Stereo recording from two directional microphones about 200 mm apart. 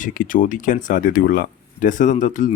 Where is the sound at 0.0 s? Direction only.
45° left (ahead or behind).